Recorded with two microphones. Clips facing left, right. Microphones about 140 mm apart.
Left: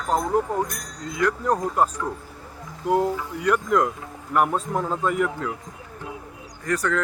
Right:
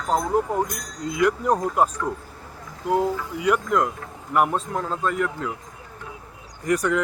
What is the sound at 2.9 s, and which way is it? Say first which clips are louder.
Speech: even; 5° right (ahead or behind).